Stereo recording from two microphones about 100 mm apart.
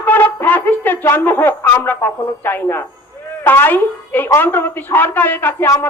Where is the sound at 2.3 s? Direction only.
20° left (ahead or behind).